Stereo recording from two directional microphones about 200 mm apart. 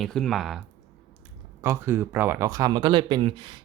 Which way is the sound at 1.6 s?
10° right (ahead or behind).